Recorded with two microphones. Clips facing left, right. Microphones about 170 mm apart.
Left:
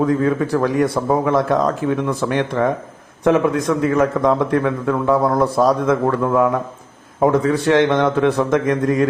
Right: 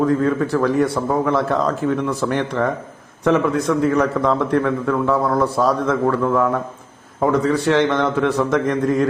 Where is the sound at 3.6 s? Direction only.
10° left (ahead or behind).